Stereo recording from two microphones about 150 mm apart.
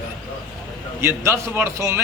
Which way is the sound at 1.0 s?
15° right (ahead or behind).